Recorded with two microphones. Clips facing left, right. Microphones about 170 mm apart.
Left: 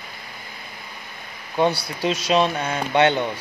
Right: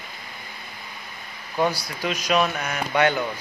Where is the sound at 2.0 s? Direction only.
25° left (ahead or behind).